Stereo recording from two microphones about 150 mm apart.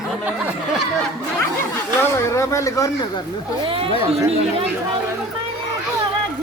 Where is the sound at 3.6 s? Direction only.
35° right (ahead or behind).